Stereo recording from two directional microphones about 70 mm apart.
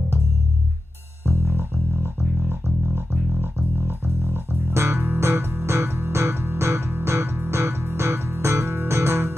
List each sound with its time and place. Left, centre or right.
3.3 s music: right